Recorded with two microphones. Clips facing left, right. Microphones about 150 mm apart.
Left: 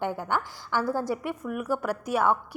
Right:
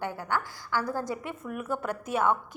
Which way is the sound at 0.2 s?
15° left (ahead or behind).